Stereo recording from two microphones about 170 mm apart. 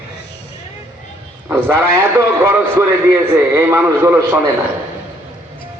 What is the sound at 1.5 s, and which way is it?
A man's voice, 15° right (ahead or behind).